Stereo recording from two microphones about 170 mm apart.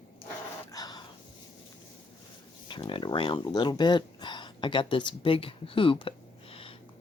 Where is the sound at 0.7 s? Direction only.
20° left (ahead or behind).